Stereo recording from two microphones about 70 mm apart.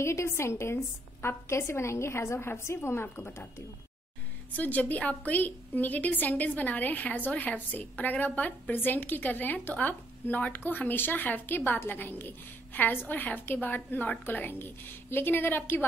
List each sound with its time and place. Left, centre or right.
0.0 s a woman's voice: left
4.6 s a woman's voice: left